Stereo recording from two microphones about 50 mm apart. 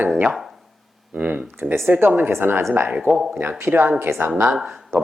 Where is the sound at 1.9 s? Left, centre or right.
Right.